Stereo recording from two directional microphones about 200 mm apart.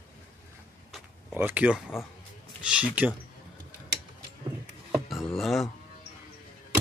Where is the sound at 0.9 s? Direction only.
10° right (ahead or behind).